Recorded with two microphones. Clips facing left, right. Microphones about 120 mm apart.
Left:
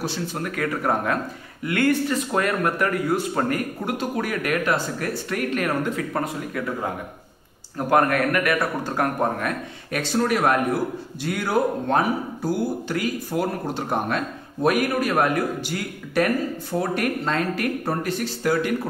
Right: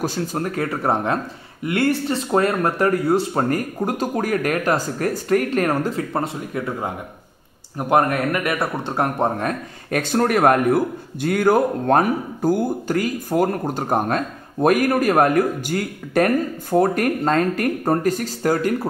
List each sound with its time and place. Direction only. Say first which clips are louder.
0.0 s speech: right 4 dB; 40° right (ahead or behind); by 9.5 s 25° right (ahead or behind)
9.8 s a man's voice: right 3 dB; 50° right (ahead or behind)